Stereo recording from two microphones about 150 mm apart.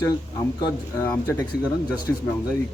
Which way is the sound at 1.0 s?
20° left (ahead or behind).